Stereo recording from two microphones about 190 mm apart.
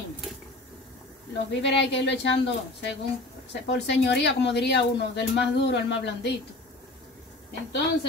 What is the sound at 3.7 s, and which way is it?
Speech, 65° left (ahead or behind).